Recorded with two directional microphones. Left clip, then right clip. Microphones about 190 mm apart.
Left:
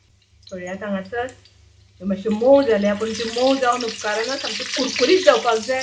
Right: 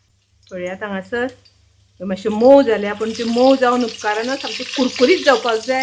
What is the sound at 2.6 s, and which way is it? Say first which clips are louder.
Speech: right 2 dB; 40° right (ahead or behind).